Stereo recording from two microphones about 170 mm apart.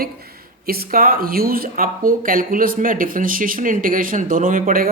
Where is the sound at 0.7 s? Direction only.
60° right (ahead or behind).